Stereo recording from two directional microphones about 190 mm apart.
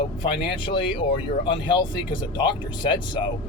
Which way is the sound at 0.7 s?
25° left (ahead or behind).